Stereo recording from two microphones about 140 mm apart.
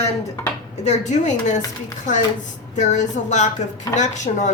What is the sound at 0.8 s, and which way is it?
Speech, 55° left (ahead or behind).